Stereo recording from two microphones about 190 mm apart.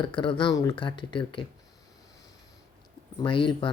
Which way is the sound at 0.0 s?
25° left (ahead or behind).